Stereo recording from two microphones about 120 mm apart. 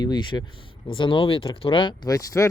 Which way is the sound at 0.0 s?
35° left (ahead or behind).